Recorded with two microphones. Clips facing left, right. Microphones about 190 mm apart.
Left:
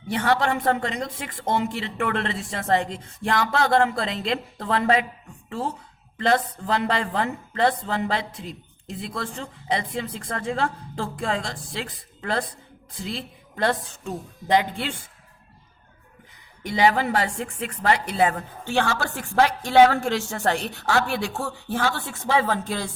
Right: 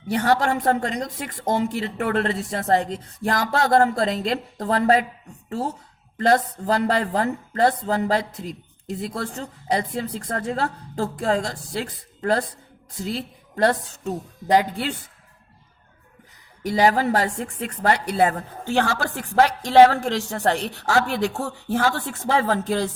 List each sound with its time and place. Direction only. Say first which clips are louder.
0.1 s a woman's voice: right 2 dB; 40° right (ahead or behind)
16.6 s a woman's voice: right 2 dB; 40° right (ahead or behind)
21.7 s a woman's voice: right 4 dB; 40° right (ahead or behind)